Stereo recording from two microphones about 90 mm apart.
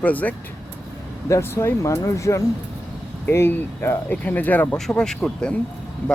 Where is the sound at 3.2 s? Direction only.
25° left (ahead or behind).